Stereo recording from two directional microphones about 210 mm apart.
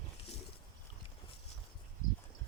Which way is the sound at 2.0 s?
40° left (ahead or behind).